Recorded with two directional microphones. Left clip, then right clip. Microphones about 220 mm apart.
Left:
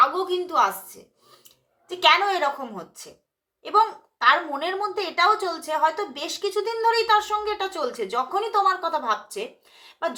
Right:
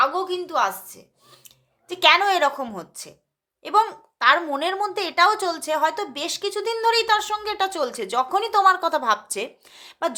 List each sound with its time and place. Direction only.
0.0 s a woman's voice: 30° right (ahead or behind)
1.9 s speech: 40° right (ahead or behind)